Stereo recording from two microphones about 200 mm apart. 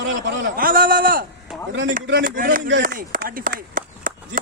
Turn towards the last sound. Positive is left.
turn(degrees=-45)  # may be behind; listen again after turning